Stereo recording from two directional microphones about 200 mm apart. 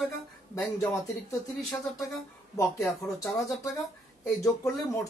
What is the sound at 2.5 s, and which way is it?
Speech, 15° left (ahead or behind).